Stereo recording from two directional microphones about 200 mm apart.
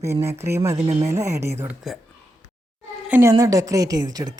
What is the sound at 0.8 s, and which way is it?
Speech, 25° right (ahead or behind).